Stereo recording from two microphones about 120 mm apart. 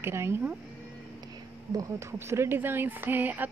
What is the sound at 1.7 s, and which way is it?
A woman's voice, 25° right (ahead or behind).